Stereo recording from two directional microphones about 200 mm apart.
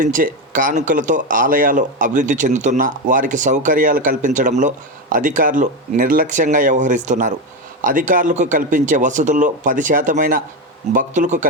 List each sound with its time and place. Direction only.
0.0 s speech: 40° right (ahead or behind)